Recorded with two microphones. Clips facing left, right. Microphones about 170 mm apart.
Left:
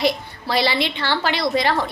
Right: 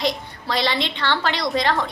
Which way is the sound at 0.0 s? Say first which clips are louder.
Left 3 dB; 10° left (ahead or behind).